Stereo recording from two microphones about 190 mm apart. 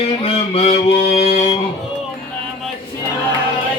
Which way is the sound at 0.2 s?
30° left (ahead or behind).